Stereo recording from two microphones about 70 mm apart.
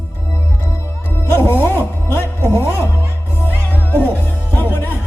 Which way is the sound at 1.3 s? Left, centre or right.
Left.